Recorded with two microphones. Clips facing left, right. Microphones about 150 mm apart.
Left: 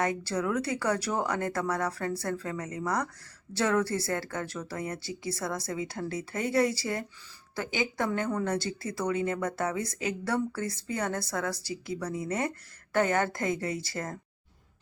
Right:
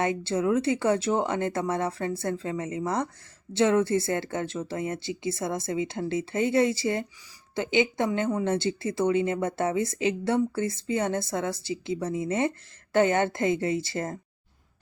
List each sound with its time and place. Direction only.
0.0 s a woman's voice: 25° right (ahead or behind)